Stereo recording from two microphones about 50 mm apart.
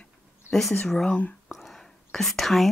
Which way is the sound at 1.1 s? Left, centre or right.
Left.